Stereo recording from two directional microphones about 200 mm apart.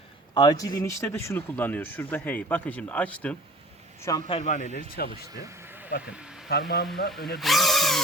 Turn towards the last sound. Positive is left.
turn(degrees=0)  # may be behind; listen again after turning